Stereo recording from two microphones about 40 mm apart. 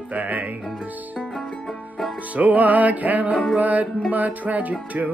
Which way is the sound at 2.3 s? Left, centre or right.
Right.